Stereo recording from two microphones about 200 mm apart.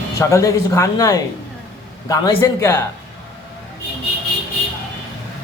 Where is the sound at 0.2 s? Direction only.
15° left (ahead or behind).